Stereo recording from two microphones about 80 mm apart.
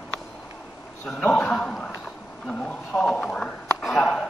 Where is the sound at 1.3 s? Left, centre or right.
Centre.